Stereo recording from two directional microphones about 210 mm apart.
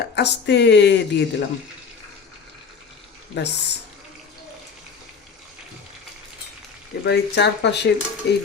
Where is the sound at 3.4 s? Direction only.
55° left (ahead or behind).